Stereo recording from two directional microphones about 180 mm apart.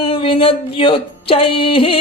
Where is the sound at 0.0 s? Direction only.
30° left (ahead or behind).